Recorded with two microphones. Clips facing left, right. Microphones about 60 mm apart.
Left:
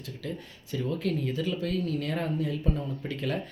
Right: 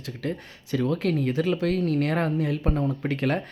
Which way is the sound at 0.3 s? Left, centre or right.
Right.